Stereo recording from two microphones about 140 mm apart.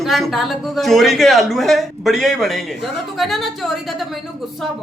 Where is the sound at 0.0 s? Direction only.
Centre (ahead or behind).